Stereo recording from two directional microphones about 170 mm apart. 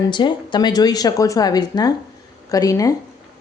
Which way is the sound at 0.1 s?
25° left (ahead or behind).